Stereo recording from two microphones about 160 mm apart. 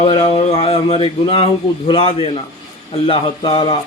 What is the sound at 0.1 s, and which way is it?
Speech, 40° left (ahead or behind).